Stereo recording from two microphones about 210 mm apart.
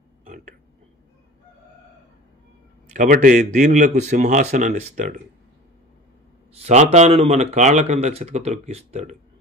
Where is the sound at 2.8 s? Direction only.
40° right (ahead or behind).